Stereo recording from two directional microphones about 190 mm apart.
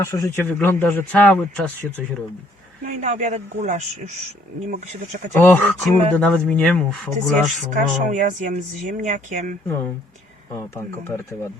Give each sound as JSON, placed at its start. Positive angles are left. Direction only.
{"t": 0.0, "sound": "speech", "side_deg": 15}
{"t": 2.8, "sound": "speech", "side_deg": -40}
{"t": 5.4, "sound": "speech", "side_deg": 10}
{"t": 7.7, "sound": "speech", "side_deg": -40}
{"t": 10.8, "sound": "speech", "side_deg": 15}